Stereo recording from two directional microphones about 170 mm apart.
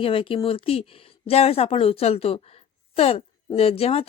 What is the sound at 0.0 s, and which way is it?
Speech, 30° left (ahead or behind).